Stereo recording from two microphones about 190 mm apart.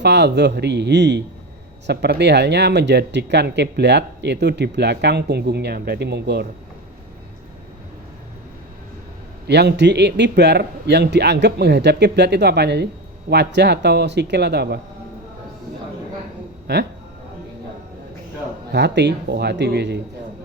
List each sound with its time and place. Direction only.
0.0 s speech: 65° right (ahead or behind)
9.5 s speech: 60° right (ahead or behind)
16.7 s speech: 65° right (ahead or behind)
18.7 s speech: 65° right (ahead or behind)